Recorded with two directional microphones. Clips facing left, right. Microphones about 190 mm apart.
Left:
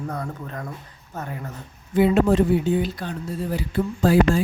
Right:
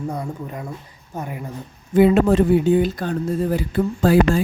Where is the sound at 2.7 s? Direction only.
50° right (ahead or behind).